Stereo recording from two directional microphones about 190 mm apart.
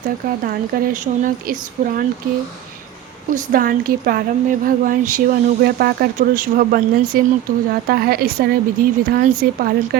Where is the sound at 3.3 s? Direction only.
45° right (ahead or behind).